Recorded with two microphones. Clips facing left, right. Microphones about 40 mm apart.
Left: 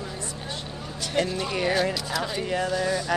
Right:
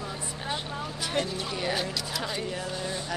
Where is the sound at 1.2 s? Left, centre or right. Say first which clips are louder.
Left 6 dB; left.